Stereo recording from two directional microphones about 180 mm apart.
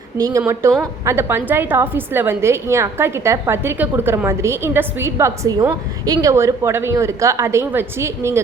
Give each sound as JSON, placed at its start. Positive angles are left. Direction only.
{"t": 0.2, "sound": "a woman's voice", "side_deg": -20}